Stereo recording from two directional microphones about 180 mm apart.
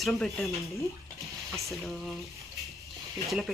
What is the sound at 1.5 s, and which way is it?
Frying, centre (ahead or behind).